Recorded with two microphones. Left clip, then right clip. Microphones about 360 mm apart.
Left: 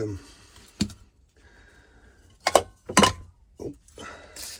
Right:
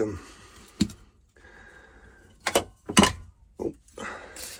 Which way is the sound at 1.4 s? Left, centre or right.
Centre.